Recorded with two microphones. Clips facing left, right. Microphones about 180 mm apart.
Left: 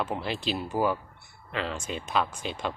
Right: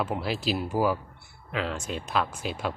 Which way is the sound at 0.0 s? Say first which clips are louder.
Right 2 dB; 5° right (ahead or behind).